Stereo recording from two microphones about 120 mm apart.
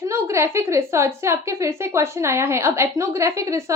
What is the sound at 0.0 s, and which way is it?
Speech, 25° right (ahead or behind).